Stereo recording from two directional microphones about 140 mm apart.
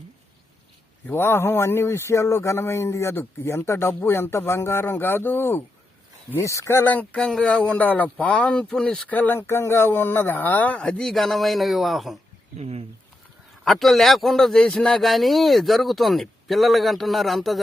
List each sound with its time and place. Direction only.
1.0 s speech: 15° left (ahead or behind); by 12.1 s centre (ahead or behind)
12.5 s speech: 50° right (ahead or behind)
13.7 s a man's voice: centre (ahead or behind)